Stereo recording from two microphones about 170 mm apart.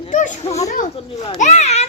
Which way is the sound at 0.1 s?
45° left (ahead or behind).